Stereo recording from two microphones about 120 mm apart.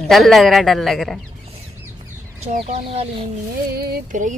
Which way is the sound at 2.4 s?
60° right (ahead or behind).